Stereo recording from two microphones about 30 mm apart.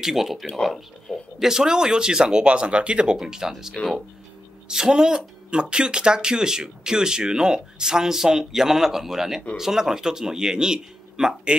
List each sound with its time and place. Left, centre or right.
0.0 s speech: centre
1.1 s a sound: centre
1.4 s speech: centre
2.4 s speech: right
3.2 s speech: centre
3.8 s speech: left
4.6 s speech: right